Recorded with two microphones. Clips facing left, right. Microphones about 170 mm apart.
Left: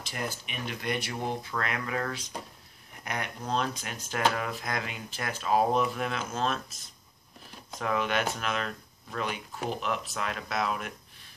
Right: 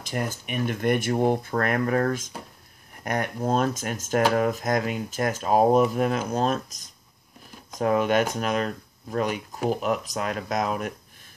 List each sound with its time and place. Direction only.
0.2 s speech: 40° right (ahead or behind)